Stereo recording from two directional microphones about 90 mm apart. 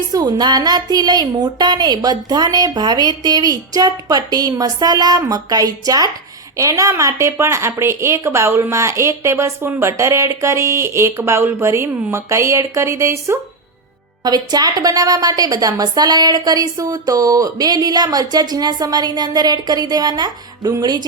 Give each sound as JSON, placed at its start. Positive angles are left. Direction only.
{"t": 0.1, "sound": "a woman's voice", "side_deg": -50}
{"t": 14.3, "sound": "a woman's voice", "side_deg": -50}